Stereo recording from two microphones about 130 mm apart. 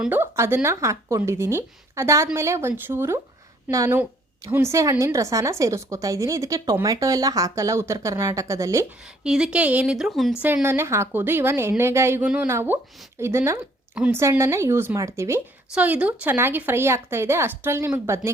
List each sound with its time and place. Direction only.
0.1 s speech: 20° right (ahead or behind)
9.2 s speech: 5° right (ahead or behind)
10.4 s speech: 15° right (ahead or behind)
12.2 s speech: 10° right (ahead or behind)
13.9 s a woman's voice: 10° right (ahead or behind)
14.2 s speech: 20° right (ahead or behind)
15.7 s speech: 10° right (ahead or behind)